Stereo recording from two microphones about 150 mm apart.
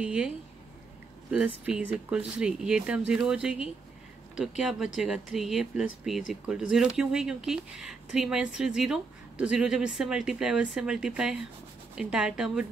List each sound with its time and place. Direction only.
0.0 s speech: 5° right (ahead or behind)
1.3 s speech: 5° right (ahead or behind)